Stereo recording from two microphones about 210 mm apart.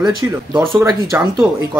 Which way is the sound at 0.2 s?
15° right (ahead or behind).